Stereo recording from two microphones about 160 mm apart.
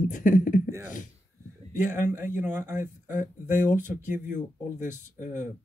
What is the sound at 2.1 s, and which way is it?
Speech, 15° right (ahead or behind).